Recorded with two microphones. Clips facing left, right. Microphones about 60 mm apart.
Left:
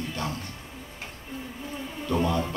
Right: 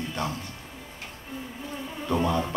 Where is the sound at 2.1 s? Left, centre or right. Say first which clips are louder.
Even; centre.